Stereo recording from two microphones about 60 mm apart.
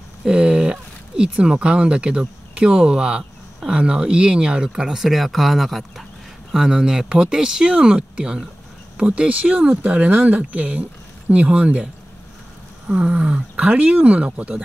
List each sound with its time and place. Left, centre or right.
0.2 s speech: centre